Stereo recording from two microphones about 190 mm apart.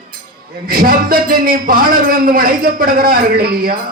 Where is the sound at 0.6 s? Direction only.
50° right (ahead or behind).